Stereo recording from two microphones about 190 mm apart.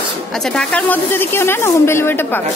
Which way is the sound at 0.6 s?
10° left (ahead or behind).